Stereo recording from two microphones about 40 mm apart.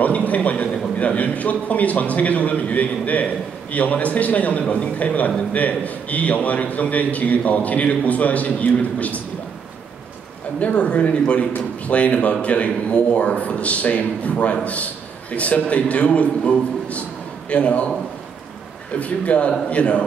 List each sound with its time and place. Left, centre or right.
0.0 s a man's voice: left
10.6 s a man's voice: left
18.9 s a man's voice: left